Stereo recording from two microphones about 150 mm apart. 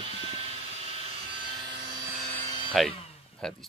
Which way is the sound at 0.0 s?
40° right (ahead or behind).